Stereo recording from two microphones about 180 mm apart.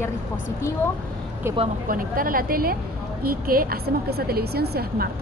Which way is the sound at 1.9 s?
50° right (ahead or behind).